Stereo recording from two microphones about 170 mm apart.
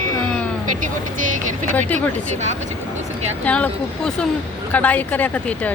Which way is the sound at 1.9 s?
45° right (ahead or behind).